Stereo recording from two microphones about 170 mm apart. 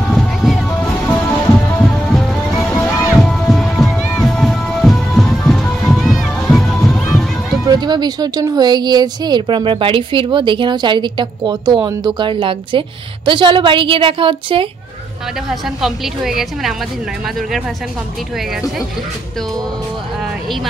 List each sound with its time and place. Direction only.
0.1 s music: centre (ahead or behind)
7.6 s speech: 25° right (ahead or behind)
15.6 s a woman's voice: centre (ahead or behind)